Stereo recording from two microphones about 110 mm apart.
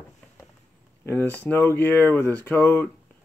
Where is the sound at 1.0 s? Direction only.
15° left (ahead or behind).